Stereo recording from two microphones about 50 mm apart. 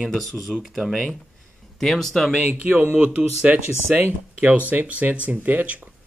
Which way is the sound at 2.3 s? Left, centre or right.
Right.